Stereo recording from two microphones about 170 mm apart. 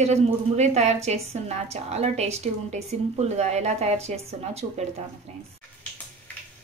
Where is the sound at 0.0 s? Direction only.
40° right (ahead or behind).